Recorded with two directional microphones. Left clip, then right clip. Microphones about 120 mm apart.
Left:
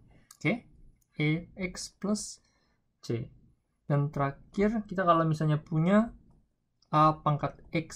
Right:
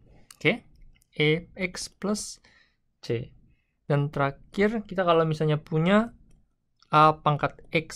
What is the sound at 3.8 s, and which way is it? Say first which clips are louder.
Speech: right 5 dB; 20° right (ahead or behind).